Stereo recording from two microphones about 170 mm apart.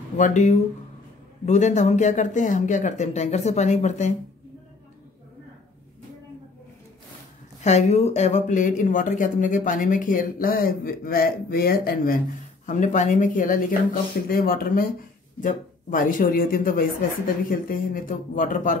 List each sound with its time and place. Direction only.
0.2 s speech: 45° left (ahead or behind)
7.6 s speech: 40° left (ahead or behind); by 12.2 s 60° left (ahead or behind)
12.6 s speech: 45° left (ahead or behind)